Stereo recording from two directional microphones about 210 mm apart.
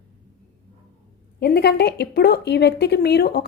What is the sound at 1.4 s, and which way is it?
A woman's voice, 50° left (ahead or behind).